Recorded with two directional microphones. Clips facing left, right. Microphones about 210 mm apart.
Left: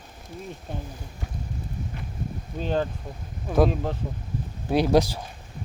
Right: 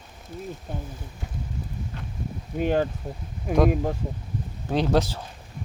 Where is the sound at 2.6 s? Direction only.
15° right (ahead or behind).